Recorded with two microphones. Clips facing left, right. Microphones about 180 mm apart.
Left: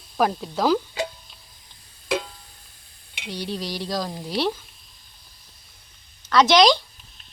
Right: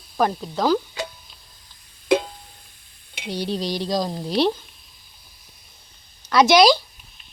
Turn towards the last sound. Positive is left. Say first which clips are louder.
# right 2 dB
turn(degrees=-10)  # may be behind; listen again after turning